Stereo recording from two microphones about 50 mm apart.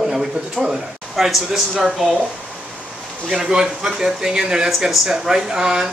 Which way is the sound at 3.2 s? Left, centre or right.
Centre.